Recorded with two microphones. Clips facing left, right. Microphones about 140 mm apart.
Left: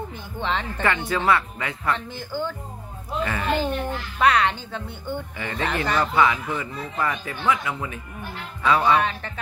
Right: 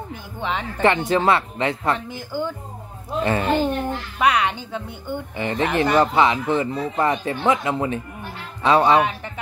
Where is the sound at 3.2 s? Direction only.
30° right (ahead or behind).